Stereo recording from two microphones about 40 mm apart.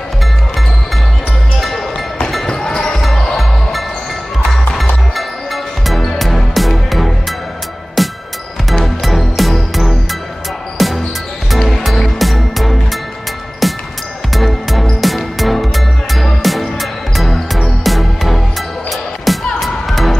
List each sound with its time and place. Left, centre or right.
2.4 s music: centre
3.0 s music: centre
5.9 s music: centre
14.3 s music: centre
17.8 s music: centre